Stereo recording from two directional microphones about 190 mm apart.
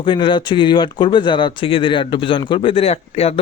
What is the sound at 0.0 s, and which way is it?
Speech, 25° left (ahead or behind).